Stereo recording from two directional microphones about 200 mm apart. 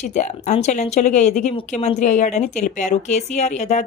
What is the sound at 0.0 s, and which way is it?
Speech, 35° left (ahead or behind).